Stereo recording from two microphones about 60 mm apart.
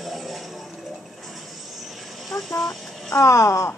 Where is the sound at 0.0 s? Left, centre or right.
Centre.